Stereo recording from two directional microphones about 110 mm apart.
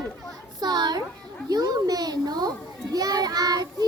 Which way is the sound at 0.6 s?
40° right (ahead or behind).